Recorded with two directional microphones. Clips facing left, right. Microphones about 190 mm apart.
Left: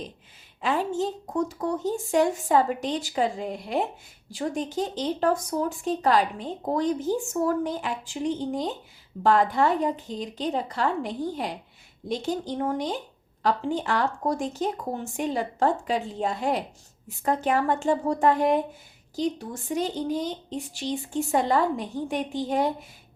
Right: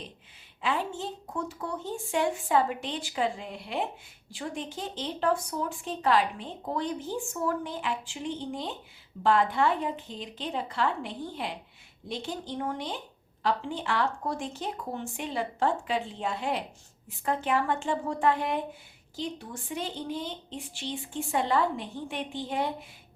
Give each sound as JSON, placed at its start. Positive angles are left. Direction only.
{"t": 0.6, "sound": "speech", "side_deg": 40}